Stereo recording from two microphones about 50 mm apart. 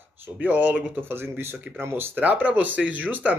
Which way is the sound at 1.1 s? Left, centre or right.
Right.